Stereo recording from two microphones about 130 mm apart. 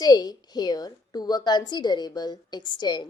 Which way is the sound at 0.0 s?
30° left (ahead or behind).